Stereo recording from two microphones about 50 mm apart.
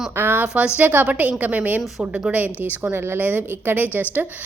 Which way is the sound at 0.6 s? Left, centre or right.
Right.